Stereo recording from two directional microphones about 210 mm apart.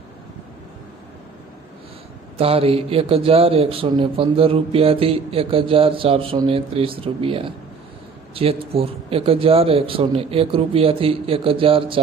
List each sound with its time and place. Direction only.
2.4 s speech: 25° right (ahead or behind)